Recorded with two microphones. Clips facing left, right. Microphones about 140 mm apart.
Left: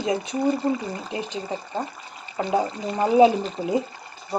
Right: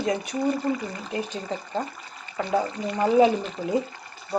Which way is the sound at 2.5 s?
20° left (ahead or behind).